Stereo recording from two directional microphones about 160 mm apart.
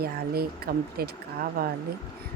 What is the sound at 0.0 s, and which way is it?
Speech, 75° right (ahead or behind).